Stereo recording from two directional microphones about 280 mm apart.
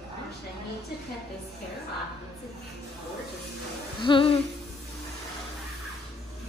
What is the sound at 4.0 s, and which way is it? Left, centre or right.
Humming, centre.